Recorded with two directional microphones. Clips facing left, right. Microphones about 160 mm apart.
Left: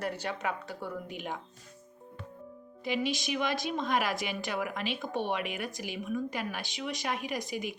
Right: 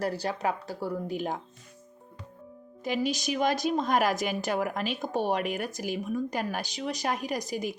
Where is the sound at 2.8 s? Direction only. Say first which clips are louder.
Right 3 dB; 40° right (ahead or behind).